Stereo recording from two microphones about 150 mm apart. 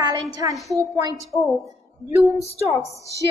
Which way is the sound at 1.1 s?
20° left (ahead or behind).